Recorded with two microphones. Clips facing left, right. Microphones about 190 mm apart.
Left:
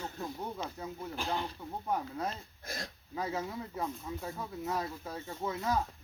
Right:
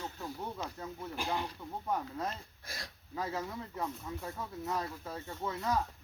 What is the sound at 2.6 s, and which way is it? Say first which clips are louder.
Speech: left 7 dB; 45° left (ahead or behind).